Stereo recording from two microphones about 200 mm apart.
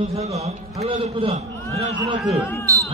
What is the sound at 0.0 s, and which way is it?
A man's voice, 30° right (ahead or behind).